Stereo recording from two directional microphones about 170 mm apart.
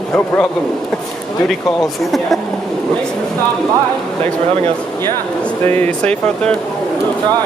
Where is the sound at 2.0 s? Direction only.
Centre (ahead or behind).